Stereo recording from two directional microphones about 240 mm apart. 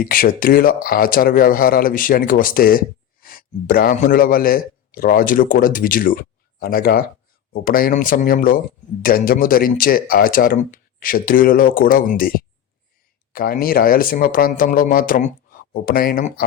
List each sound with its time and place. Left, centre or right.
0.0 s speech: left